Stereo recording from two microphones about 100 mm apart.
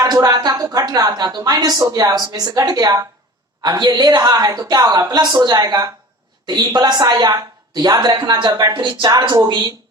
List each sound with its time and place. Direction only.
0.0 s a woman's voice: 40° right (ahead or behind)